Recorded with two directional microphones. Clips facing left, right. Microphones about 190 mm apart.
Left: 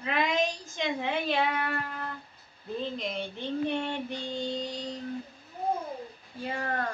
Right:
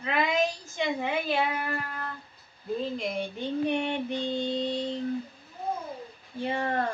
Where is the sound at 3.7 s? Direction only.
15° right (ahead or behind).